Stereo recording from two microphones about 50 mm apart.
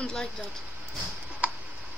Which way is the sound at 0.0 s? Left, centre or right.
Centre.